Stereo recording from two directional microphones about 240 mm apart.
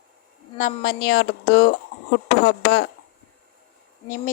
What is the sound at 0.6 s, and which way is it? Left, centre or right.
Speech, left.